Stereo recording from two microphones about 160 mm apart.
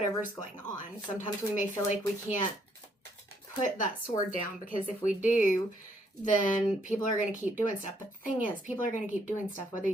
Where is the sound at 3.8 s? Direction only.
55° left (ahead or behind).